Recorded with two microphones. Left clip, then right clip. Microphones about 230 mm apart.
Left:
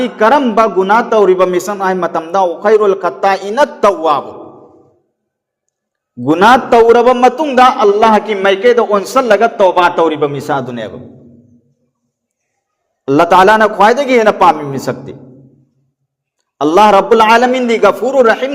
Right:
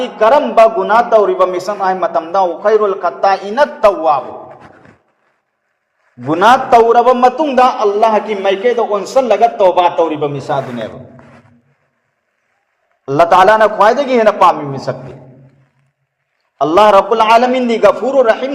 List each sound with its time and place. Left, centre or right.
0.0 s a man's voice: left
6.2 s a man's voice: left
13.1 s a man's voice: left
16.6 s a man's voice: left